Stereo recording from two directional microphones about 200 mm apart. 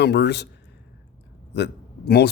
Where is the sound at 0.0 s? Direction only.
55° left (ahead or behind).